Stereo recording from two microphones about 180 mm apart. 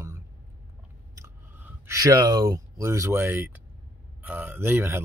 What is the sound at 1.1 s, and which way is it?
Speech, 15° right (ahead or behind).